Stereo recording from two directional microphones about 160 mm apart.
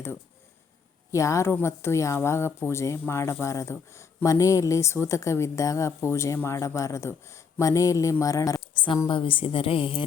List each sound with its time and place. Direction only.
1.1 s a woman's voice: 20° left (ahead or behind); by 10.0 s 35° left (ahead or behind)